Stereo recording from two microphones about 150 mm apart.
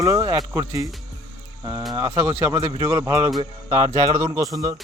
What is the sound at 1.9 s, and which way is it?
Speech, 20° right (ahead or behind).